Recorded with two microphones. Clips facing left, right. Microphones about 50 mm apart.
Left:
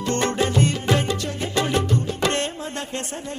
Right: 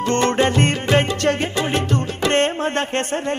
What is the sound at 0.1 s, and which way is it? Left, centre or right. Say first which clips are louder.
Music: right 4 dB; right.